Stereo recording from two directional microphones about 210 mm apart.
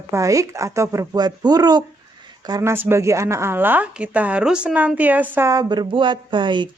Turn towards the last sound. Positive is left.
turn(degrees=-20)  # may be behind; listen again after turning